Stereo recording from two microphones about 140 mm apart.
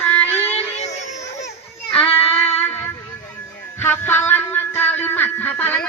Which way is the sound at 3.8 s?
15° left (ahead or behind).